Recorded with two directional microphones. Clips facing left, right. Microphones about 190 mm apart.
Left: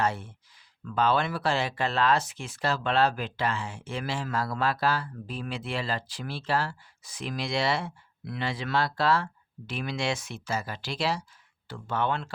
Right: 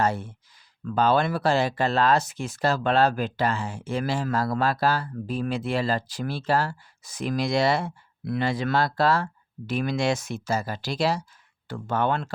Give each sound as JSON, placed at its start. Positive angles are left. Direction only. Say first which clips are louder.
{"t": 0.0, "sound": "speech", "louder": "right 4 dB", "side_deg": -40}